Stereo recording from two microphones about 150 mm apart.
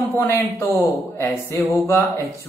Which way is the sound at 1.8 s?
15° left (ahead or behind).